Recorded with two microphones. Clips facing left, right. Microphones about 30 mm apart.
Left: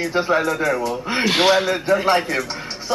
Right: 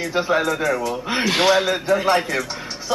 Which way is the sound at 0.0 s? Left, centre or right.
Centre.